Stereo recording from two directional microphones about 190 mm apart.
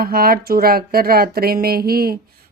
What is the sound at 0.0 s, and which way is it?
Speech, 50° right (ahead or behind).